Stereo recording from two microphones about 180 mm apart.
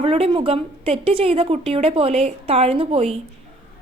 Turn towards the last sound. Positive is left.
turn(degrees=-30)  # may be behind; listen again after turning